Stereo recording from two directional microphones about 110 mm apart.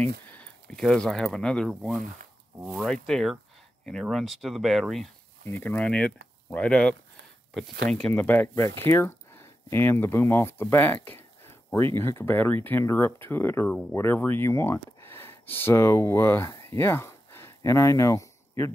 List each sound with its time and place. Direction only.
0.0 s speech: 15° left (ahead or behind)
5.4 s speech: 20° left (ahead or behind)
8.1 s speech: 15° left (ahead or behind)
16.5 s a sound: 20° left (ahead or behind)